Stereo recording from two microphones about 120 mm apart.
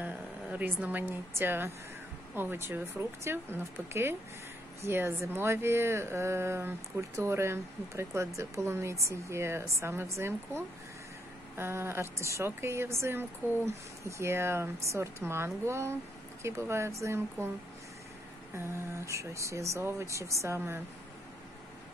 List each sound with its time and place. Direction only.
0.0 s a woman's voice: 15° right (ahead or behind)
18.5 s speech: 25° right (ahead or behind)